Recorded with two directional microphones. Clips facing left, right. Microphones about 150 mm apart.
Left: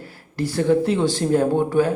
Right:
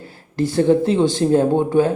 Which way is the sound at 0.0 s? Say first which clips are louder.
Right 4 dB; 25° right (ahead or behind).